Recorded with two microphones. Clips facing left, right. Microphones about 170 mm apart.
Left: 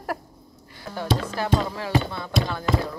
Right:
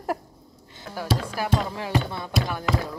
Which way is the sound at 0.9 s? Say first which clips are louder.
Left 2 dB; 5° right (ahead or behind).